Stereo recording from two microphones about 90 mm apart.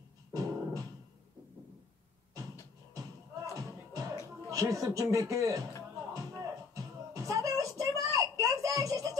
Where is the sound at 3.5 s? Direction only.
40° right (ahead or behind).